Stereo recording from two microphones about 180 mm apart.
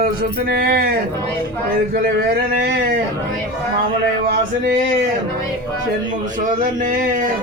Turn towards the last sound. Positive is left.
turn(degrees=-50)  # may be behind; listen again after turning